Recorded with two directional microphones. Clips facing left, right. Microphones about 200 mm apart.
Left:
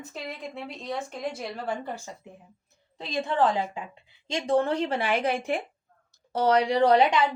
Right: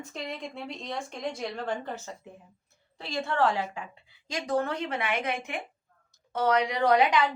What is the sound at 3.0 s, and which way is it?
A woman's voice, 20° left (ahead or behind).